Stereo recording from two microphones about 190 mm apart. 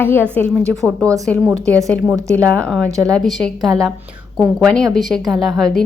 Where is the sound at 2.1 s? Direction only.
15° right (ahead or behind).